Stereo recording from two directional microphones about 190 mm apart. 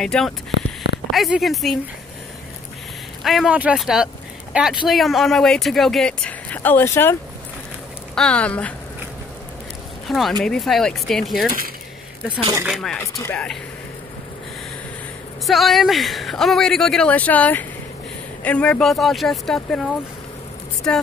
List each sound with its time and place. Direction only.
0.0 s speech: 5° left (ahead or behind)
3.3 s speech: 5° right (ahead or behind)
10.0 s speech: centre (ahead or behind)
12.4 s speech: 25° right (ahead or behind)
12.6 s speech: centre (ahead or behind)
15.4 s speech: centre (ahead or behind)